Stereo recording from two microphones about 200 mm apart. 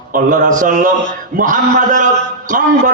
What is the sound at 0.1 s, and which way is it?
A man's voice, 40° right (ahead or behind).